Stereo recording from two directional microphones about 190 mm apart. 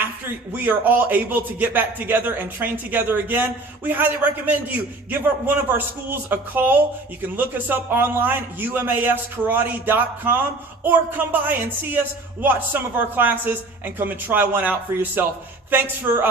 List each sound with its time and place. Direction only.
0.5 s a man's voice: 10° right (ahead or behind)